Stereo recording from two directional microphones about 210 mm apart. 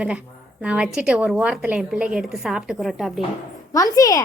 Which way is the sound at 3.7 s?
15° left (ahead or behind).